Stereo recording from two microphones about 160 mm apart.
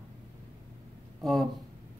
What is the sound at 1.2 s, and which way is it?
Speech, centre (ahead or behind).